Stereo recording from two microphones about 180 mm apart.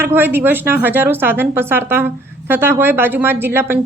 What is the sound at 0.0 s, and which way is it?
Speech, 10° right (ahead or behind).